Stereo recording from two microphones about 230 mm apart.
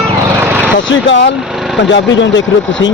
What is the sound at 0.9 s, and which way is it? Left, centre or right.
Speech, left.